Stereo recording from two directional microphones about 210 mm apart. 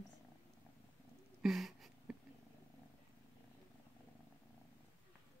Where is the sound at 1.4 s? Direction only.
Centre (ahead or behind).